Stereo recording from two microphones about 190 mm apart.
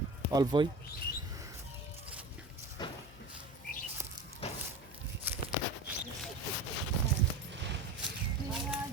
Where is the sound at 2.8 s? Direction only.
20° left (ahead or behind).